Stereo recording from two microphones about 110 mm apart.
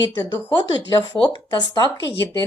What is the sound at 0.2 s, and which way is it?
Speech, 40° left (ahead or behind).